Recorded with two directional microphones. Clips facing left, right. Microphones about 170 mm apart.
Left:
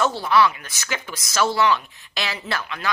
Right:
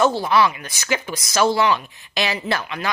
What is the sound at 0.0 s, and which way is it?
A woman's voice, 15° right (ahead or behind).